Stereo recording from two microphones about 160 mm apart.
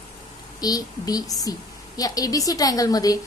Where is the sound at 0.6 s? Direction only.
25° left (ahead or behind).